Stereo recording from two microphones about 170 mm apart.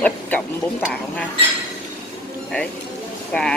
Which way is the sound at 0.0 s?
10° left (ahead or behind).